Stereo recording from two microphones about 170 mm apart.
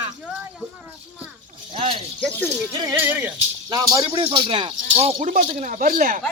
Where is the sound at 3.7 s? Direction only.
20° right (ahead or behind); by 6.2 s 50° right (ahead or behind).